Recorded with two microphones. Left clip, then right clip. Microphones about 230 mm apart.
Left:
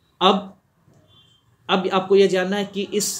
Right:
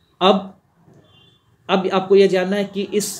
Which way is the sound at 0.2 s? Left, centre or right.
Centre.